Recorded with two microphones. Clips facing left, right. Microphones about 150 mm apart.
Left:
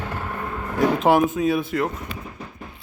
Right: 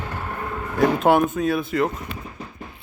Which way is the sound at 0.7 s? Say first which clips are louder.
Even; centre (ahead or behind).